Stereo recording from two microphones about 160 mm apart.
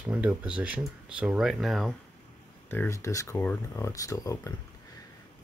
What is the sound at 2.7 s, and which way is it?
Speech, 15° left (ahead or behind).